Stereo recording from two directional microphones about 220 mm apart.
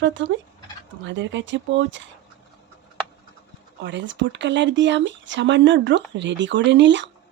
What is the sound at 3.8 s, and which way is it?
Speech, 55° right (ahead or behind).